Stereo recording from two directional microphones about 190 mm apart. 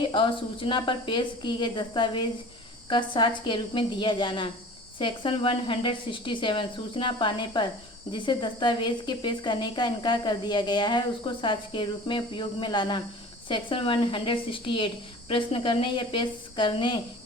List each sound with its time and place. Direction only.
0.0 s speech: 25° left (ahead or behind)